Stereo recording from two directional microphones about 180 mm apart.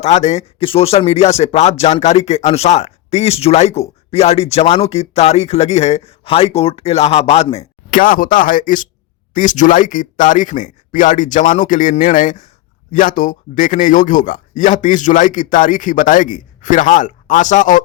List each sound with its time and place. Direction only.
0.0 s speech: 40° left (ahead or behind)
7.9 s speech: 50° left (ahead or behind)